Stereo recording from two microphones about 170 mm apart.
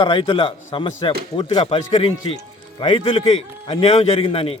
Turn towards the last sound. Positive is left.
turn(degrees=35)  # may be behind; listen again after turning